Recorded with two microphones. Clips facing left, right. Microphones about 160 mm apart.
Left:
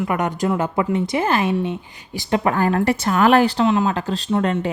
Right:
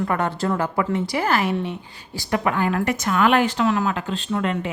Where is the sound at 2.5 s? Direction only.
40° left (ahead or behind).